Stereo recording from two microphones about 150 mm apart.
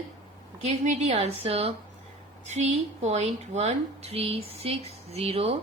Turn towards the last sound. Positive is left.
turn(degrees=-40)  # may be behind; listen again after turning